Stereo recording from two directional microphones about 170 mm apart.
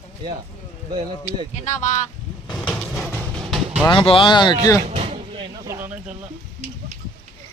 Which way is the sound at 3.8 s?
30° left (ahead or behind).